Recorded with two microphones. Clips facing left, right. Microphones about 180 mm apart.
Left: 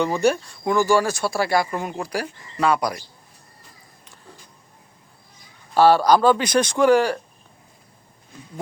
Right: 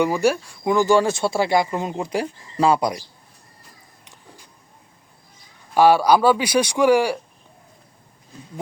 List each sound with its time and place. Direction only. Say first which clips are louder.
0.0 s speech: right 1 dB; 10° right (ahead or behind); by 2.9 s 30° right (ahead or behind)
5.7 s speech: even; 10° right (ahead or behind)